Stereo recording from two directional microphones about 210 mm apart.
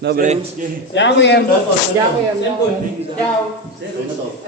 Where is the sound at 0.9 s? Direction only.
60° left (ahead or behind).